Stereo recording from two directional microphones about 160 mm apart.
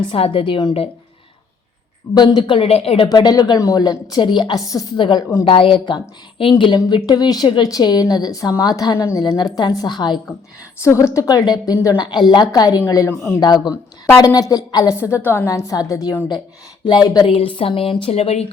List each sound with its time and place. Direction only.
0.1 s speech: 35° left (ahead or behind)
2.1 s speech: 30° left (ahead or behind)
3.1 s a woman's voice: 25° left (ahead or behind)